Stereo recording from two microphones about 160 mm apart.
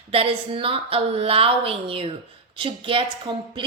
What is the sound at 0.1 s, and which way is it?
Speech, 35° right (ahead or behind).